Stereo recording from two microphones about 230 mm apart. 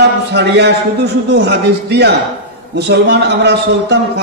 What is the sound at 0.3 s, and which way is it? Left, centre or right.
A man's voice, right.